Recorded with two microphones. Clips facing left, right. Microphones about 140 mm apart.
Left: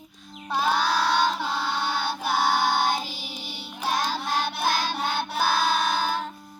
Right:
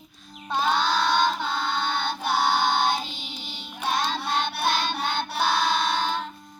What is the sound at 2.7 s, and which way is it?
Child singing, 5° left (ahead or behind).